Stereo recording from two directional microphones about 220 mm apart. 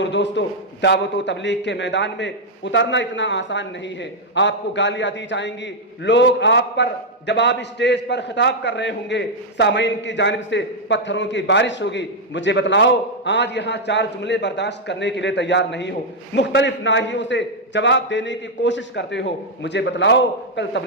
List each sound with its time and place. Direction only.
0.0 s a man's voice: 55° left (ahead or behind)